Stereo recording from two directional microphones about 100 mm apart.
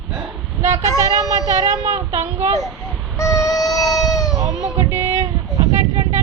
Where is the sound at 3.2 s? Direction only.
35° left (ahead or behind).